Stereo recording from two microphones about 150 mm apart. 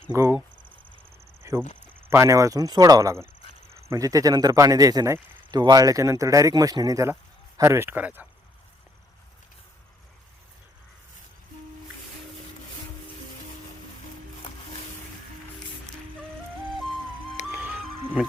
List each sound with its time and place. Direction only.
0.1 s speech: 15° right (ahead or behind)
1.4 s cricket: 20° right (ahead or behind)
2.0 s speech: 20° right (ahead or behind)
17.5 s music: 15° right (ahead or behind)